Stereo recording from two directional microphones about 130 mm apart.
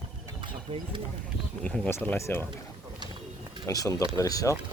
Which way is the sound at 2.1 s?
20° left (ahead or behind).